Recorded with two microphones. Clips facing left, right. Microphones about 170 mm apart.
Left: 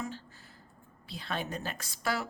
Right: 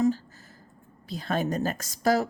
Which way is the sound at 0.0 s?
40° right (ahead or behind).